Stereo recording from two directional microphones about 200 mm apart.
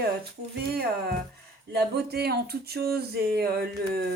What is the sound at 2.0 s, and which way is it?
Speech, 50° right (ahead or behind).